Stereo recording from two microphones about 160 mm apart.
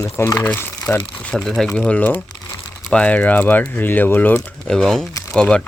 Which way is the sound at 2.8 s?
5° left (ahead or behind).